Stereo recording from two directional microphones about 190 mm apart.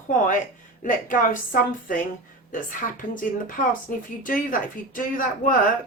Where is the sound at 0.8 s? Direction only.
45° left (ahead or behind).